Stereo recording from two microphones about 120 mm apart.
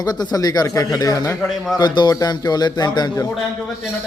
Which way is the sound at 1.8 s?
35° left (ahead or behind).